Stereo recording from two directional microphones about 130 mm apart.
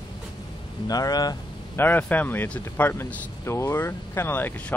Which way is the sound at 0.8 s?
30° left (ahead or behind).